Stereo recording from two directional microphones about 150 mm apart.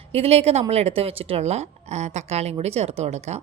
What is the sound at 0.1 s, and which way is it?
A woman's voice, 45° right (ahead or behind).